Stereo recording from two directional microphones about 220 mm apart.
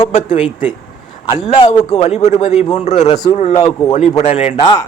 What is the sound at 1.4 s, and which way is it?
A man's voice, 25° left (ahead or behind).